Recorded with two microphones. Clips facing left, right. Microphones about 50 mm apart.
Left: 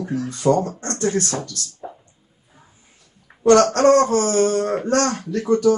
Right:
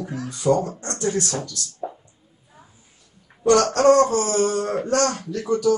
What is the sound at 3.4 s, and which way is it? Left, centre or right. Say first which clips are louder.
Speech: left 2 dB; left.